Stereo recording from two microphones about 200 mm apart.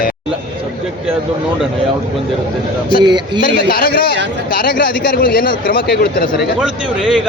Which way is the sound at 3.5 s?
50° left (ahead or behind).